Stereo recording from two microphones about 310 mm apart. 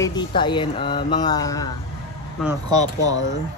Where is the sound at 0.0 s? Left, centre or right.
Centre.